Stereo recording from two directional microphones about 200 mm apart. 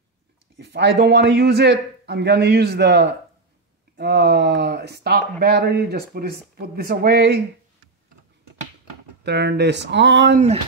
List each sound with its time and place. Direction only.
0.6 s a man's voice: 60° right (ahead or behind)
9.2 s a man's voice: 55° right (ahead or behind)
10.3 s a sound: 35° right (ahead or behind)